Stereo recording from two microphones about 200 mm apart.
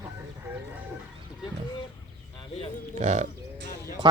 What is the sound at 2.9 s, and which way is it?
Speech, 35° right (ahead or behind).